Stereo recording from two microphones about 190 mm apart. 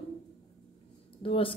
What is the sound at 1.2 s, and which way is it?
Speech, 30° left (ahead or behind).